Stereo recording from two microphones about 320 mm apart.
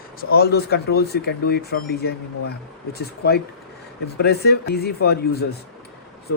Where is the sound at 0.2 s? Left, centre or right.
Left.